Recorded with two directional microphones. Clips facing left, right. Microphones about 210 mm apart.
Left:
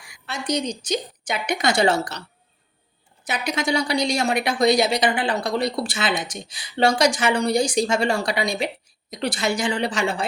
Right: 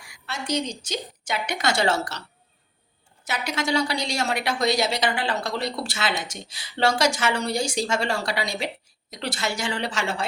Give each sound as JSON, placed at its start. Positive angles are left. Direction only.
{"t": 0.1, "sound": "speech", "side_deg": 15}
{"t": 3.2, "sound": "speech", "side_deg": 15}